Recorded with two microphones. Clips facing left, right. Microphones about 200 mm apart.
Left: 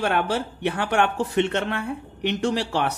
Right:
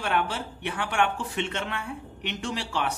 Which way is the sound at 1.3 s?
60° left (ahead or behind).